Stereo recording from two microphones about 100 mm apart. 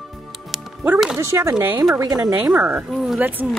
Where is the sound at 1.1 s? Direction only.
25° right (ahead or behind).